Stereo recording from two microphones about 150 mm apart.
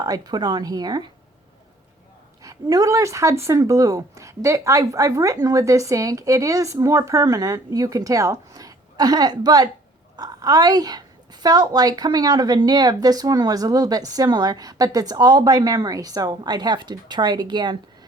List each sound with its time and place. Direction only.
0.0 s a woman's voice: 25° right (ahead or behind)
2.4 s a woman's voice: 25° right (ahead or behind)